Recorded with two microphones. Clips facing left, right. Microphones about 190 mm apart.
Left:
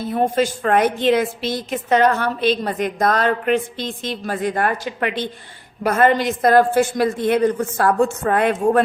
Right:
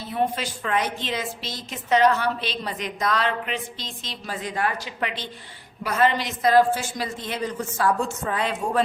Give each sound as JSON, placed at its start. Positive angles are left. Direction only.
{"t": 0.1, "sound": "a woman's voice", "side_deg": 45}